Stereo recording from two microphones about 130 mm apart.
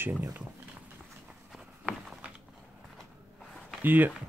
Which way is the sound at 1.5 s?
5° right (ahead or behind).